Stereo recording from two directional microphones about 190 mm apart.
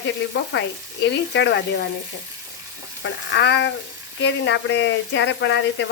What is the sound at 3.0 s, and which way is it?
Speech, 65° left (ahead or behind).